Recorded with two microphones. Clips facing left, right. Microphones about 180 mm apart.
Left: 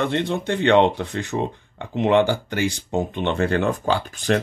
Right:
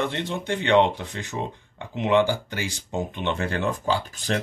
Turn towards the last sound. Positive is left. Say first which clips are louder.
# left 5 dB
turn(degrees=60)  # may be behind; listen again after turning